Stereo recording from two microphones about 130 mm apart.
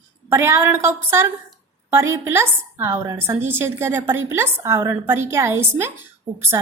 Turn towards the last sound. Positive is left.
turn(degrees=-20)  # may be behind; listen again after turning